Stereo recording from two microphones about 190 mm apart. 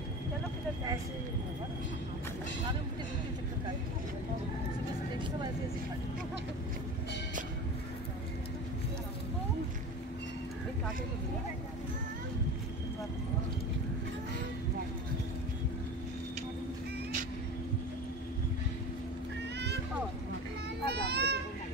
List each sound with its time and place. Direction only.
20.8 s children playing: 60° right (ahead or behind)